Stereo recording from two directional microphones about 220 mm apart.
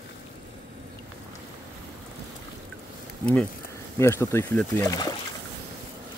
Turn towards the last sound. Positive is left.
turn(degrees=15)  # may be behind; listen again after turning